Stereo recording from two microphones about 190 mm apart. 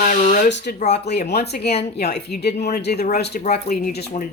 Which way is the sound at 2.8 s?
55° left (ahead or behind).